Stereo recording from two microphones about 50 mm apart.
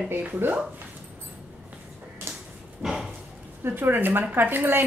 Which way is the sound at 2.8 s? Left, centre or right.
Centre.